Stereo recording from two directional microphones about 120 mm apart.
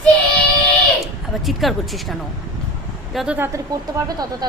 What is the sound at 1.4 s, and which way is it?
A woman's voice, centre (ahead or behind).